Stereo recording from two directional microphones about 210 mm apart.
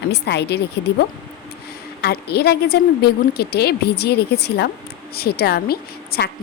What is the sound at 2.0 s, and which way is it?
A woman's voice, 50° left (ahead or behind).